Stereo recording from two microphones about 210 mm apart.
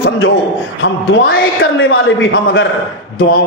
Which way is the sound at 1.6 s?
70° left (ahead or behind).